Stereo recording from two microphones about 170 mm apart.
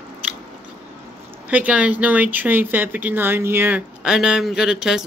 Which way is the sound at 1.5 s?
10° right (ahead or behind).